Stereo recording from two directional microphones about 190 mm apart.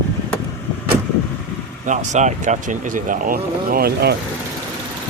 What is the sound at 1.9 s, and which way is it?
Speech, 40° right (ahead or behind).